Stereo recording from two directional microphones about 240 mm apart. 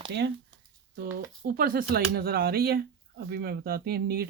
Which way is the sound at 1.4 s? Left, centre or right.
Right.